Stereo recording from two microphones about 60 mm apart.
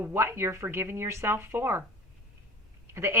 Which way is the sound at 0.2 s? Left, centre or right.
Right.